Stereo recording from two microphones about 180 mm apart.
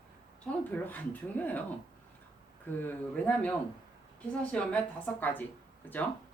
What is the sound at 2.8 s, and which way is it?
Speech, 10° left (ahead or behind).